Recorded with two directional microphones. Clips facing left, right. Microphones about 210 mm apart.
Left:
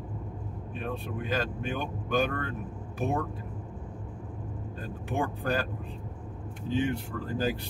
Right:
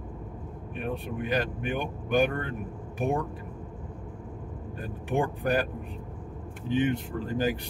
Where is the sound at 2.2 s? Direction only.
15° right (ahead or behind).